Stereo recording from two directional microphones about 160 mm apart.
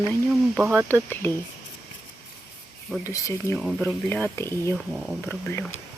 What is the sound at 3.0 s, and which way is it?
Speech, 20° left (ahead or behind).